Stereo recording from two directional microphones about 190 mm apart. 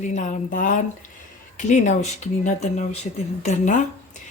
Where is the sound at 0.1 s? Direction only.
40° left (ahead or behind).